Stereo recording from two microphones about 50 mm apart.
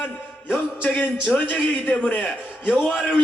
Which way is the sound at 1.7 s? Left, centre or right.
Left.